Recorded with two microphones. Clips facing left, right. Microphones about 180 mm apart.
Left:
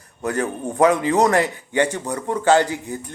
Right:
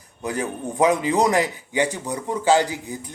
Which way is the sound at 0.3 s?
15° right (ahead or behind).